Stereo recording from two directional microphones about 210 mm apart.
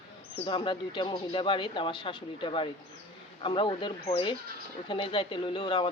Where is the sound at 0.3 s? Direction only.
25° left (ahead or behind).